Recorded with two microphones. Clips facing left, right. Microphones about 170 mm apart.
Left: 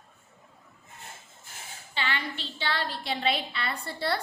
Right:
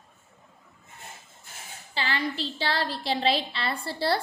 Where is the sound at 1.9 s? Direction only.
35° right (ahead or behind).